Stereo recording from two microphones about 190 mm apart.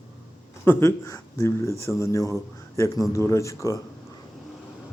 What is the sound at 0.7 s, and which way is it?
Speech, 15° left (ahead or behind).